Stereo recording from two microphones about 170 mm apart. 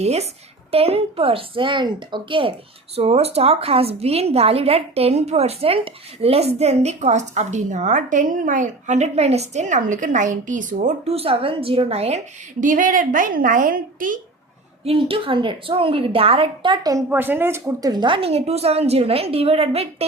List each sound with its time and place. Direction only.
0.0 s a woman's voice: 40° right (ahead or behind)
14.8 s a woman's voice: 35° right (ahead or behind)
17.1 s a woman's voice: 10° right (ahead or behind); by 20.1 s 35° right (ahead or behind)